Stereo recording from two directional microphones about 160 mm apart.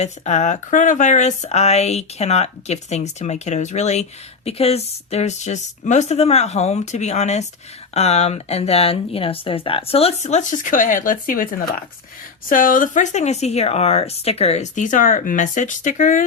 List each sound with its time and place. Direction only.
0.0 s speech: 45° left (ahead or behind)